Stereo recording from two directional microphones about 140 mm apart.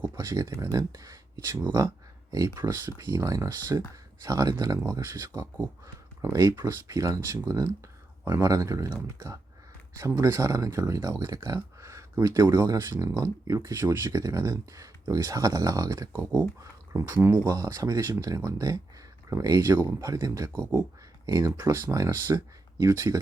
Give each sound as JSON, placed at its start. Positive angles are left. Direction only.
{"t": 0.2, "sound": "speech", "side_deg": -20}
{"t": 5.2, "sound": "speech", "side_deg": -30}